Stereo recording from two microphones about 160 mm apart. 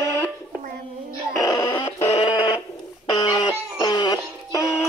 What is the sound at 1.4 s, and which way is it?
Music, 20° left (ahead or behind).